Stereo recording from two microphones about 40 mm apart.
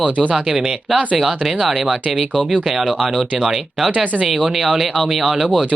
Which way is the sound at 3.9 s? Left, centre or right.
Right.